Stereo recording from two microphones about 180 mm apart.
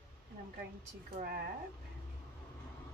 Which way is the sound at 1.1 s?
55° right (ahead or behind).